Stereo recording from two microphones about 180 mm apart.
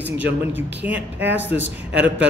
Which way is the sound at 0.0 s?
10° right (ahead or behind).